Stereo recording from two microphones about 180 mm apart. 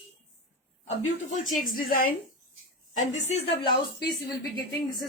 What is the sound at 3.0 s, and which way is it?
Speech, 35° left (ahead or behind).